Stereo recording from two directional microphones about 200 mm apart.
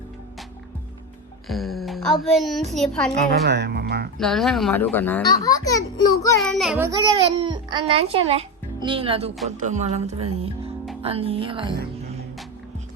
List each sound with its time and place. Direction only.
1.5 s speech: centre (ahead or behind)
3.1 s speech: 55° right (ahead or behind)
4.2 s a child's voice: centre (ahead or behind); by 6.1 s 15° left (ahead or behind)
6.4 s speech: centre (ahead or behind)
6.7 s a child's voice: 15° right (ahead or behind)
9.6 s music: 35° right (ahead or behind)
11.0 s a child's voice: 30° right (ahead or behind)